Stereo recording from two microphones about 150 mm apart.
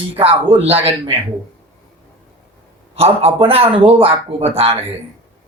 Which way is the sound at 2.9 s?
40° right (ahead or behind).